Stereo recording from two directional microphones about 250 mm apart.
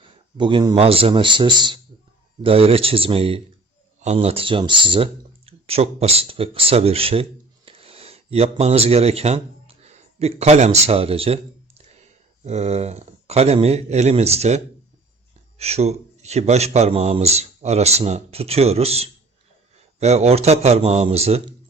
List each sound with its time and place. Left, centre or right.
0.0 s a man's voice: centre